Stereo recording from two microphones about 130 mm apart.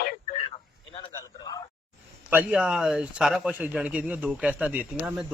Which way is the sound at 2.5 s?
5° right (ahead or behind).